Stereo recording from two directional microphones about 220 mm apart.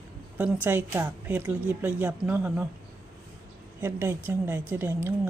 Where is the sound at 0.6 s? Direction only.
10° right (ahead or behind).